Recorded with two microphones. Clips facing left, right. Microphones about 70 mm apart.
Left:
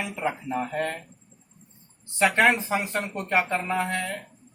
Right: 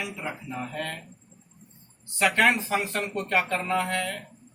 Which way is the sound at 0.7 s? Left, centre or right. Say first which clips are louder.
Left 5 dB; left.